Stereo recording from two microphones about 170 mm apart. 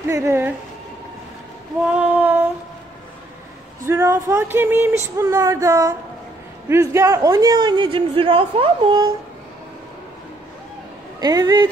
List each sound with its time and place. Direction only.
0.1 s speech: 15° right (ahead or behind)
2.0 s child singing: 10° right (ahead or behind)
3.8 s a man's voice: 15° right (ahead or behind)
11.1 s a man's voice: 20° right (ahead or behind)